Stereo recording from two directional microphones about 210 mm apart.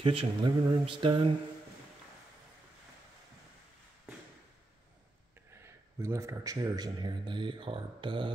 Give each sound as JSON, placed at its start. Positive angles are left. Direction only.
{"t": 0.0, "sound": "a man's voice", "side_deg": -25}
{"t": 5.5, "sound": "a man's voice", "side_deg": -10}